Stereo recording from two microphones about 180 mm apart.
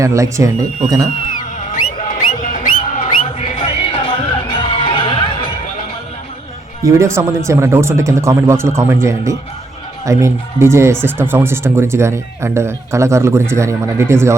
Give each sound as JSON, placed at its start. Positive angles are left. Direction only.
{"t": 0.0, "sound": "speech", "side_deg": -15}
{"t": 1.7, "sound": "a sound", "side_deg": 45}
{"t": 6.8, "sound": "speech", "side_deg": -15}